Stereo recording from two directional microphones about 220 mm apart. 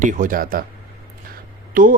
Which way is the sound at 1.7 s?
40° right (ahead or behind).